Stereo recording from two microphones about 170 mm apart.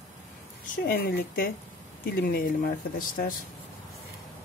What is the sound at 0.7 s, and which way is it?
Speech, 60° left (ahead or behind).